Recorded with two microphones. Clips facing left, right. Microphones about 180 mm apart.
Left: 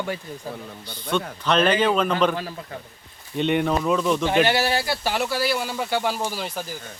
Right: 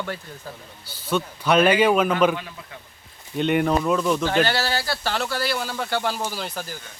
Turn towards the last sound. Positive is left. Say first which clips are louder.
# left 1 dB
turn(degrees=5)  # may be behind; listen again after turning